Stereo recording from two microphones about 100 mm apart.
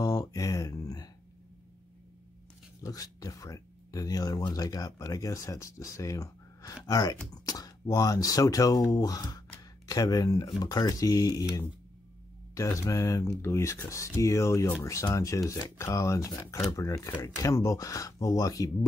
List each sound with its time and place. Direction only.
0.0 s a sound: 35° left (ahead or behind)
2.8 s speech: 40° left (ahead or behind)
12.5 s speech: 30° left (ahead or behind)